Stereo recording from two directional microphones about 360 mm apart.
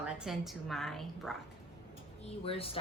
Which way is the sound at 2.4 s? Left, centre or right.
Centre.